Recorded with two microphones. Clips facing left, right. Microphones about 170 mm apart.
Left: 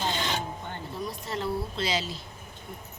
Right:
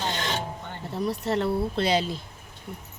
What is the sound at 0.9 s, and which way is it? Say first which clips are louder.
Speech: right 9 dB; 70° right (ahead or behind).